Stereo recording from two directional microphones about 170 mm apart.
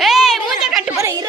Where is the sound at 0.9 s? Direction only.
20° right (ahead or behind).